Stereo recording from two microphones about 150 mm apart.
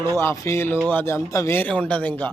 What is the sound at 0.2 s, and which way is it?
A man's voice, 15° left (ahead or behind).